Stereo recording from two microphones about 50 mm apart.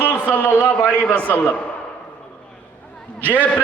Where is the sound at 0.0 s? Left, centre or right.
Left.